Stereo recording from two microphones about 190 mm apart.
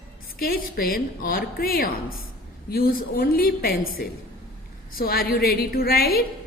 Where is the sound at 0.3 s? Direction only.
50° left (ahead or behind).